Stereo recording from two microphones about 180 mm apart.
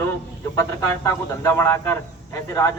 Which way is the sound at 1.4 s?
15° left (ahead or behind).